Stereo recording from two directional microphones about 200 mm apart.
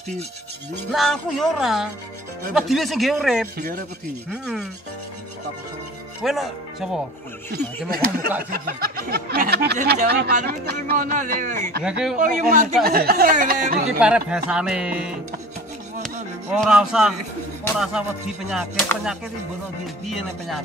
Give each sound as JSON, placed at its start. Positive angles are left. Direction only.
{"t": 0.9, "sound": "speech", "side_deg": 0}
{"t": 3.5, "sound": "speech", "side_deg": -50}
{"t": 4.3, "sound": "speech", "side_deg": 0}
{"t": 6.2, "sound": "speech", "side_deg": 0}
{"t": 7.5, "sound": "speech", "side_deg": -50}
{"t": 11.8, "sound": "speech", "side_deg": -5}
{"t": 12.2, "sound": "speech", "side_deg": -40}
{"t": 13.8, "sound": "speech", "side_deg": -5}
{"t": 16.5, "sound": "speech", "side_deg": 0}
{"t": 20.1, "sound": "speech", "side_deg": 0}